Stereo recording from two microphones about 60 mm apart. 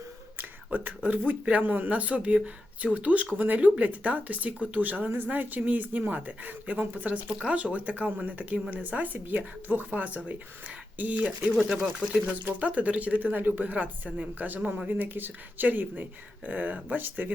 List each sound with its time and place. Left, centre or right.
0.3 s whispering: right
1.3 s speech: right
11.5 s speech: centre
11.8 s speech: centre
12.2 s speech: right